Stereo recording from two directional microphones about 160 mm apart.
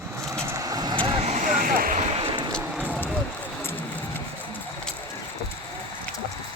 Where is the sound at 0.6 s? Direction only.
25° right (ahead or behind); by 2.0 s 65° right (ahead or behind).